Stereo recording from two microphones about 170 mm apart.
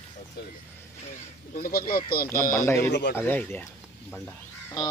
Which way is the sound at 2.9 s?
90° left.